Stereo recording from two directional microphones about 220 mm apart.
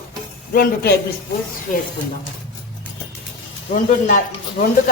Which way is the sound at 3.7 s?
35° left (ahead or behind).